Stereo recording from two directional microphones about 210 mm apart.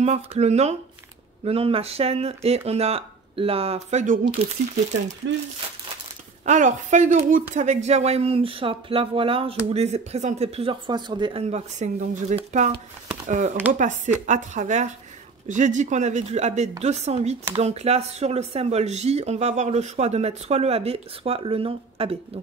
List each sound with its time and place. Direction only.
0.0 s a woman's voice: 30° right (ahead or behind)
6.4 s a woman's voice: 35° right (ahead or behind)